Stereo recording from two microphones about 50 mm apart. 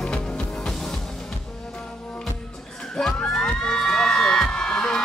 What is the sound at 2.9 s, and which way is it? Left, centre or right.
Crowd, centre.